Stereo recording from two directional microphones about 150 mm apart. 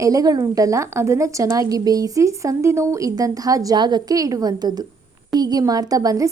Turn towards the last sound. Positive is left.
turn(degrees=-20)  # may be behind; listen again after turning